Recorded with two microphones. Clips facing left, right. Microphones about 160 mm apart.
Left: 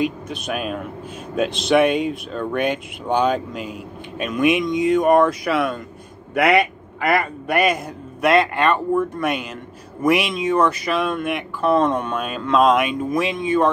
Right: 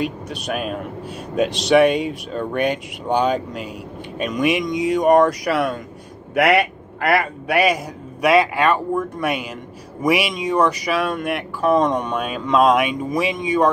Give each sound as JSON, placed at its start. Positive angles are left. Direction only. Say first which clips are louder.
{"t": 0.0, "sound": "a man's voice", "louder": "left 2 dB", "side_deg": 0}
{"t": 11.9, "sound": "speech", "louder": "right 1 dB", "side_deg": 5}